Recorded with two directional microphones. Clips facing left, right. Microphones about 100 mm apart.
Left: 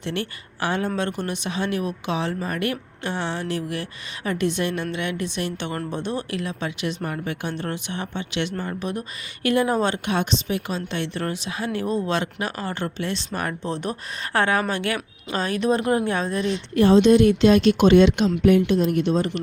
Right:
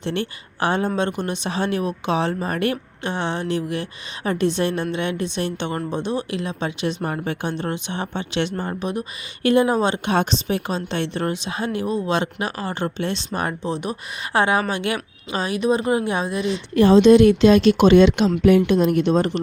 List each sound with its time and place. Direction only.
0.0 s a woman's voice: 30° right (ahead or behind)
1.5 s a woman's voice: 35° right (ahead or behind); by 10.0 s 20° right (ahead or behind)
10.1 s a woman's voice: 35° right (ahead or behind); by 16.5 s 10° right (ahead or behind)
17.0 s speech: 90° right
18.5 s speech: 65° right (ahead or behind)